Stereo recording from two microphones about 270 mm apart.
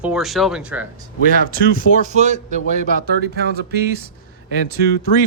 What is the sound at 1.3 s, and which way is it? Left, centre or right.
A man's voice, right.